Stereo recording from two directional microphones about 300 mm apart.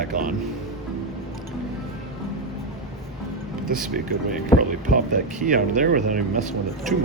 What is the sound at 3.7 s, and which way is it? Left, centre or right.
Speech, right.